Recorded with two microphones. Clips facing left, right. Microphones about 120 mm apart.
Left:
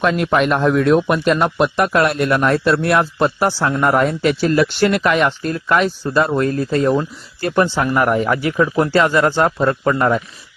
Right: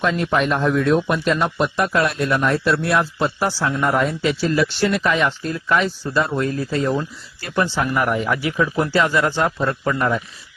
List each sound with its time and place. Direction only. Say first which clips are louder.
0.0 s a man's voice: left 3 dB; 55° left (ahead or behind)